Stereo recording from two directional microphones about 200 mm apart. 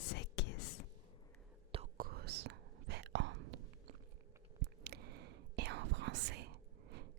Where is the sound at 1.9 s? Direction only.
50° right (ahead or behind); by 3.6 s 65° right (ahead or behind).